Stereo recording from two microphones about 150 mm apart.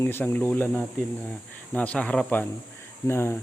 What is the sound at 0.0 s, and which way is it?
Speech, 15° left (ahead or behind).